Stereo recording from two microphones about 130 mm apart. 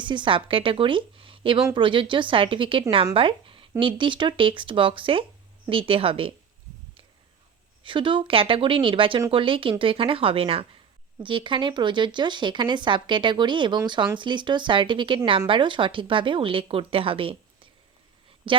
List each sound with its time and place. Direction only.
0.0 s a woman's voice: 35° right (ahead or behind)
7.9 s a woman's voice: 40° right (ahead or behind)